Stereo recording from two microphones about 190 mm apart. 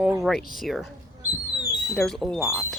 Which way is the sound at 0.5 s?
Centre (ahead or behind).